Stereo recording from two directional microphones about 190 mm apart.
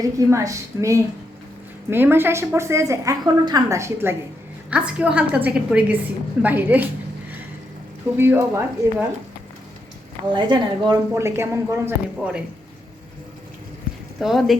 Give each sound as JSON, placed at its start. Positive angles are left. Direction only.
{"t": 0.0, "sound": "a woman's voice", "side_deg": -15}
{"t": 8.1, "sound": "a woman's voice", "side_deg": -10}
{"t": 10.3, "sound": "a woman's voice", "side_deg": -25}
{"t": 11.1, "sound": "a woman's voice", "side_deg": -15}
{"t": 14.2, "sound": "a woman's voice", "side_deg": 0}